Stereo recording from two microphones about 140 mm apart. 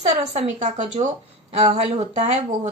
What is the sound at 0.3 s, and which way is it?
Speech, 50° right (ahead or behind).